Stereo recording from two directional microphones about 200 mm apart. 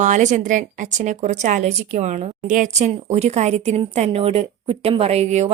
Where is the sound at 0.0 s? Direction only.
35° right (ahead or behind).